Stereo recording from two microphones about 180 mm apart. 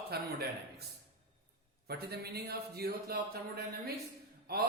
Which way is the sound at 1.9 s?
60° right (ahead or behind).